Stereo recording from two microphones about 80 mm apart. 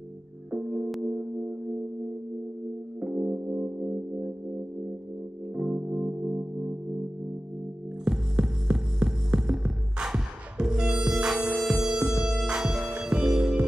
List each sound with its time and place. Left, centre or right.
0.5 s music: centre
3.0 s music: centre
5.6 s music: centre
8.0 s hum: centre
11.8 s music: centre